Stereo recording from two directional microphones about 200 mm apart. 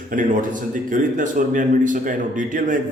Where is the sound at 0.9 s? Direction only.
40° right (ahead or behind).